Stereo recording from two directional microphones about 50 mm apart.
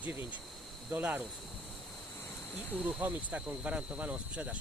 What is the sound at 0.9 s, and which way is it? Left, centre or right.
Speech, right.